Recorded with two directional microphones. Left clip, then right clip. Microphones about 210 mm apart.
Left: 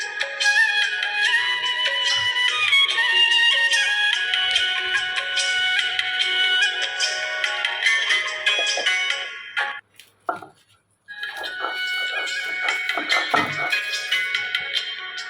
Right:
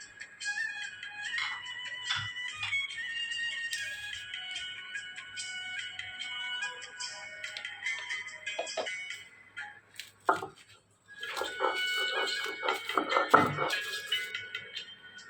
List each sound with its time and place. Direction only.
0.2 s music: 40° left (ahead or behind)
11.8 s music: 20° left (ahead or behind)